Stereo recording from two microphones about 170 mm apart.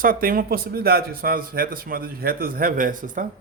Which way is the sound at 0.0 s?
55° right (ahead or behind).